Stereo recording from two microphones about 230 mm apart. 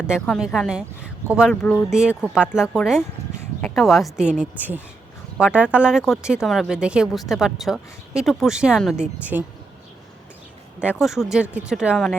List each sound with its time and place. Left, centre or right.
0.1 s speech: centre
10.8 s speech: centre